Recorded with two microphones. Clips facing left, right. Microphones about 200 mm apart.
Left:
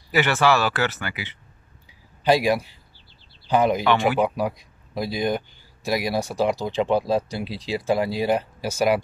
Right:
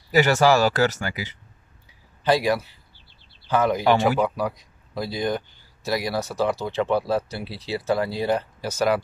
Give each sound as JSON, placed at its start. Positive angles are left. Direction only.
{"t": 0.1, "sound": "speech", "side_deg": -40}
{"t": 2.2, "sound": "speech", "side_deg": 15}